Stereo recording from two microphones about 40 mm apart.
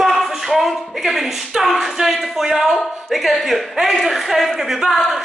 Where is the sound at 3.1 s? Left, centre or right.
Centre.